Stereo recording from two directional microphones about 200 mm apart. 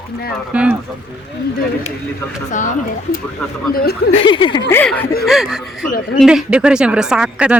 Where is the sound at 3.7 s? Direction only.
50° left (ahead or behind).